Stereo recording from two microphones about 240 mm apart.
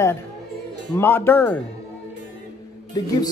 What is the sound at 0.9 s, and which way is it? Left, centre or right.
Speech, centre.